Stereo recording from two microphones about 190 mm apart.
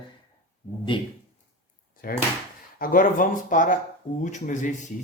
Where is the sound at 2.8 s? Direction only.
45° left (ahead or behind).